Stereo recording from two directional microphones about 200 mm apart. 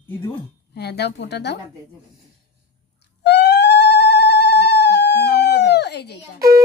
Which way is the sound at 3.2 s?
55° left (ahead or behind).